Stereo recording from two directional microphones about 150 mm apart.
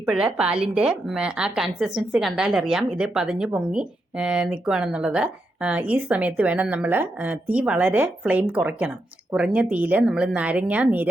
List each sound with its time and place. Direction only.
0.0 s a woman's voice: 5° right (ahead or behind)